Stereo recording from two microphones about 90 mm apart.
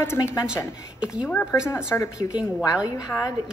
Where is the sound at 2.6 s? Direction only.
40° left (ahead or behind).